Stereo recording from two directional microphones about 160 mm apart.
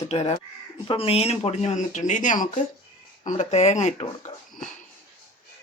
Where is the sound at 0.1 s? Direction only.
40° left (ahead or behind).